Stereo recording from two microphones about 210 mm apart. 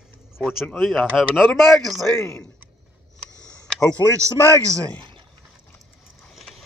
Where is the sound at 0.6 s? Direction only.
Centre (ahead or behind).